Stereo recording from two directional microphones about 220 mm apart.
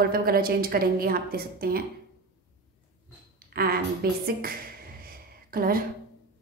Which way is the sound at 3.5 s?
45° right (ahead or behind).